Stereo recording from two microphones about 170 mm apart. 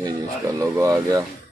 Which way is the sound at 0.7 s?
20° right (ahead or behind).